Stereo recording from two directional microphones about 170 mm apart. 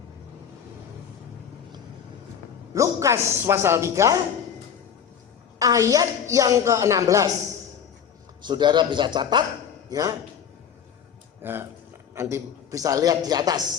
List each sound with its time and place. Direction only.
2.7 s speech: 20° right (ahead or behind)
5.5 s a woman's voice: 20° right (ahead or behind)
8.4 s a woman's voice: 25° right (ahead or behind)
11.4 s a woman's voice: 15° right (ahead or behind)